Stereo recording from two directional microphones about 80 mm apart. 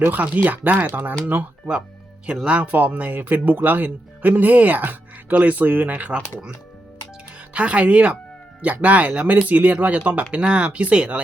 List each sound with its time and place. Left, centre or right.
0.0 s speech: right
7.5 s speech: centre